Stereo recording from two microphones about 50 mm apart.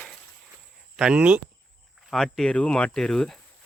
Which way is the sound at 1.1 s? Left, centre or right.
Right.